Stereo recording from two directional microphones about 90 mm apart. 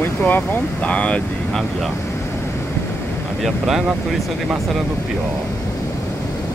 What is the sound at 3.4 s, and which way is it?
Speech, centre (ahead or behind).